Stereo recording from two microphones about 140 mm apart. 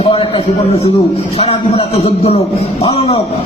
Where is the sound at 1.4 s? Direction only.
45° left (ahead or behind).